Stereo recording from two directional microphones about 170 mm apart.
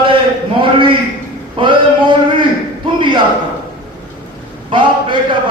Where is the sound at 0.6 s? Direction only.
30° right (ahead or behind).